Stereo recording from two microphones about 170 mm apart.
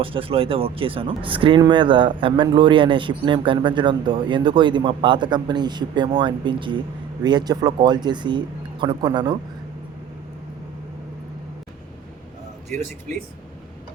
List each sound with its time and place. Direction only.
0.0 s speech: 30° right (ahead or behind)